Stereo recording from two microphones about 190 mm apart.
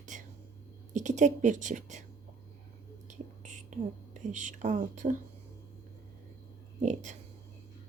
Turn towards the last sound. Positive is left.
turn(degrees=-40)  # may be behind; listen again after turning